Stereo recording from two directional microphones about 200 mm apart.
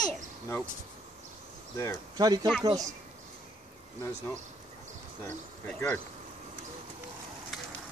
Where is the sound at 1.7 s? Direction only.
15° left (ahead or behind).